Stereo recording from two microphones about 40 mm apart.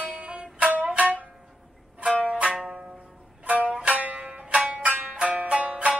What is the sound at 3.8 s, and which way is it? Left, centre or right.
Music, right.